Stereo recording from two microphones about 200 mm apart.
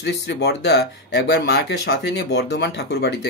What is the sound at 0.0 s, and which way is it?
Speech, 60° left (ahead or behind).